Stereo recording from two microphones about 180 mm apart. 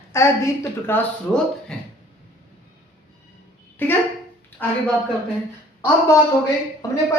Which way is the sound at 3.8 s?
10° left (ahead or behind).